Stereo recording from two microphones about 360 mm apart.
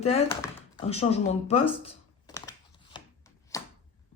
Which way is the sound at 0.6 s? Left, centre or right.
Centre.